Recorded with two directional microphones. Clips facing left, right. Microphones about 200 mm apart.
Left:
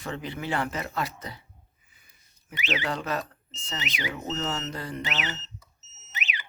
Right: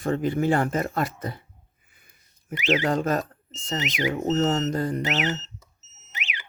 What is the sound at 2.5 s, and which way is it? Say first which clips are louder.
Speech: right 8 dB; 45° right (ahead or behind).